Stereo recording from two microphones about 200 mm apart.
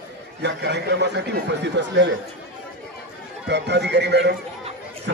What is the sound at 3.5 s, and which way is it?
Speech, 60° right (ahead or behind).